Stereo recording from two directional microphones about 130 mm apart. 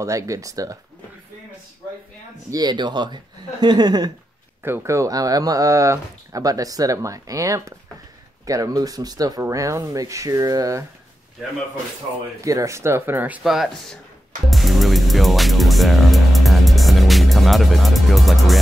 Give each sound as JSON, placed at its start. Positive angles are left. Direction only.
{"t": 0.0, "sound": "speech", "side_deg": -25}
{"t": 2.5, "sound": "speech", "side_deg": -35}
{"t": 4.6, "sound": "speech", "side_deg": -20}
{"t": 12.4, "sound": "speech", "side_deg": -25}
{"t": 13.4, "sound": "speech", "side_deg": 0}
{"t": 14.5, "sound": "music", "side_deg": 0}